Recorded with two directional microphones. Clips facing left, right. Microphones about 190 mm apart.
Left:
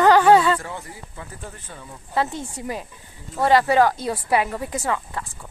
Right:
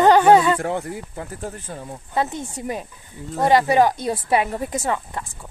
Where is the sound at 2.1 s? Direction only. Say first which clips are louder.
Even; 20° right (ahead or behind).